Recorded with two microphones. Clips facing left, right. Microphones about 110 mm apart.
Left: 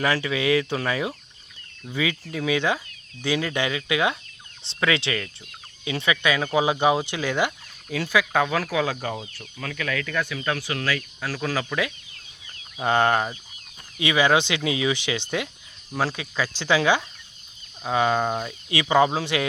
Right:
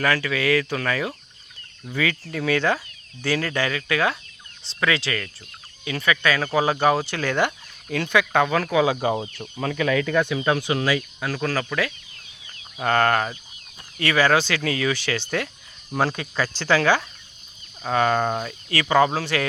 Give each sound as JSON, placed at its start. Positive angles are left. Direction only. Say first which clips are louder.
{"t": 0.0, "sound": "speech", "louder": "right 1 dB", "side_deg": 20}
{"t": 1.9, "sound": "speech", "louder": "right 1 dB", "side_deg": 10}
{"t": 8.8, "sound": "speech", "louder": "right 6 dB", "side_deg": -15}
{"t": 11.2, "sound": "speech", "louder": "right 3 dB", "side_deg": 0}
{"t": 11.4, "sound": "speech", "louder": "right 1 dB", "side_deg": 10}
{"t": 16.0, "sound": "speech", "louder": "right 2 dB", "side_deg": 5}